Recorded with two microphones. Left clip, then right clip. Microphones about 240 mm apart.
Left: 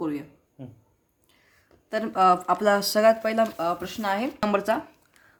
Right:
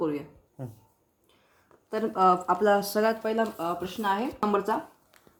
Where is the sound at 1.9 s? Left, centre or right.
Left.